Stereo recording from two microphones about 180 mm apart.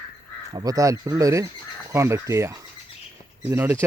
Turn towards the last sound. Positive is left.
turn(degrees=-15)  # may be behind; listen again after turning